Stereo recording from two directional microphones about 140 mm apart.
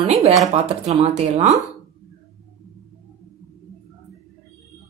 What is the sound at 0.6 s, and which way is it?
Speech, 45° right (ahead or behind).